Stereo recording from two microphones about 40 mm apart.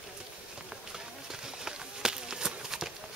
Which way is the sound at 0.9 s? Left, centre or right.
Centre.